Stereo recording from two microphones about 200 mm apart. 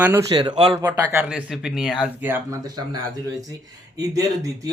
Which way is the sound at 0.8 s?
10° right (ahead or behind).